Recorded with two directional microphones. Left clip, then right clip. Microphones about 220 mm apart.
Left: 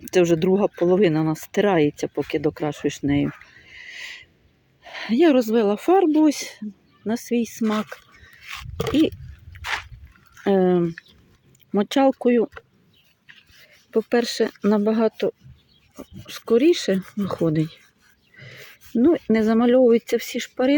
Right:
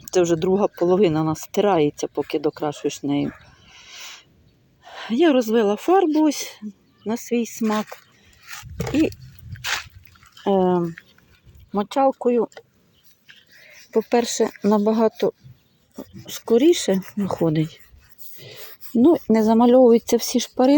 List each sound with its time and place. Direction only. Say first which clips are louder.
0.0 s speech: left 1 dB; 10° left (ahead or behind)
3.7 s wild animals: left 3 dB; centre (ahead or behind)
4.8 s speech: left 1 dB; 10° left (ahead or behind)
10.4 s speech: even; 15° left (ahead or behind)
11.7 s speech: even; 25° left (ahead or behind)
13.9 s speech: right 1 dB; 5° left (ahead or behind)
18.3 s speech: right 1 dB; 10° right (ahead or behind)